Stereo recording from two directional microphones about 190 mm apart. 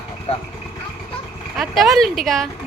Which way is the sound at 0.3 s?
30° left (ahead or behind).